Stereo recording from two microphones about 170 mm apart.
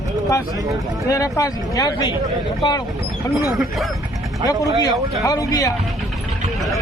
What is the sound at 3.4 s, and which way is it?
Speech, 20° right (ahead or behind).